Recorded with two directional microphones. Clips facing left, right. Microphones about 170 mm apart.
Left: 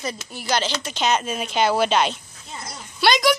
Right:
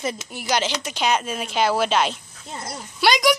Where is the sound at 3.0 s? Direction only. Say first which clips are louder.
Even; 10° right (ahead or behind).